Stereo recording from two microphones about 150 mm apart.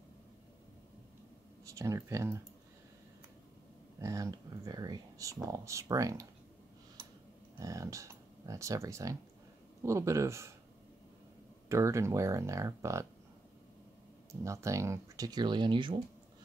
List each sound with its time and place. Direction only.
1.7 s speech: 20° right (ahead or behind)
4.0 s speech: 20° right (ahead or behind)
7.5 s speech: 20° right (ahead or behind)
11.7 s speech: 20° right (ahead or behind)
14.3 s speech: 20° right (ahead or behind)